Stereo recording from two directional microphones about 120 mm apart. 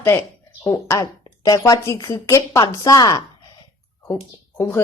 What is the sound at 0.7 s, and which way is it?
Speech, 25° left (ahead or behind).